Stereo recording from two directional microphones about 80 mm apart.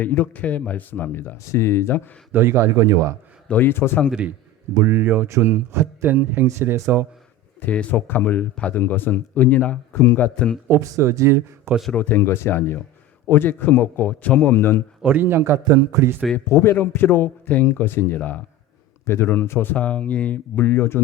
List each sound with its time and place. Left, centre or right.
0.0 s speech: left
2.3 s speech: right
3.5 s speech: left
4.8 s speech: right
7.6 s speech: centre
10.7 s speech: right
11.9 s speech: left
15.0 s speech: right
15.6 s a man's voice: right
16.5 s speech: left
16.7 s speech: left